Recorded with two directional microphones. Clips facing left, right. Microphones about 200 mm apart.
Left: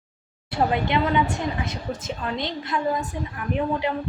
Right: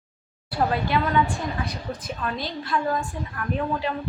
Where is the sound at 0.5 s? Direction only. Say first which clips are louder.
Left 1 dB; 20° left (ahead or behind).